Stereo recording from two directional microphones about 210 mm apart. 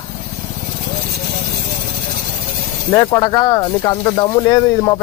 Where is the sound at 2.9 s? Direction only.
15° left (ahead or behind).